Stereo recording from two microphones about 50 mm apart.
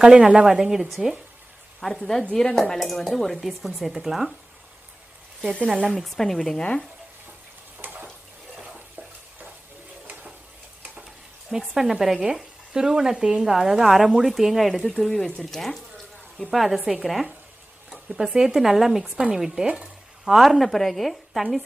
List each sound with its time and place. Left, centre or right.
0.0 s speech: centre
1.8 s speech: centre
5.9 s speech: centre
7.8 s a sound: right
11.7 s speech: centre
14.9 s speech: centre
18.3 s speech: centre
18.6 s speech: centre
19.6 s speech: centre
20.2 s speech: centre